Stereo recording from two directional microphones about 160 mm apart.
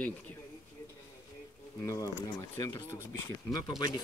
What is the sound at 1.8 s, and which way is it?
Speech, 20° left (ahead or behind).